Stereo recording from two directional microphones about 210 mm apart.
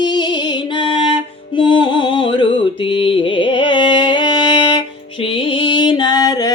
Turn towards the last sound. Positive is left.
turn(degrees=15)  # may be behind; listen again after turning